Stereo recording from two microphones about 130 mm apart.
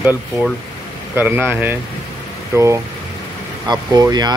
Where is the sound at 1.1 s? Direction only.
15° right (ahead or behind).